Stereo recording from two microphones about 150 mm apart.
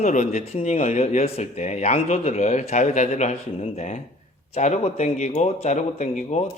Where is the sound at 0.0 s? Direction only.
55° left (ahead or behind).